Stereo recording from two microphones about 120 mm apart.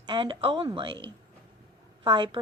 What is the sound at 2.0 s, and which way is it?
Speech, 45° right (ahead or behind).